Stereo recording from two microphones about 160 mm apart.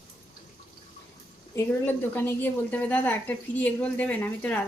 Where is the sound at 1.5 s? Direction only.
15° left (ahead or behind).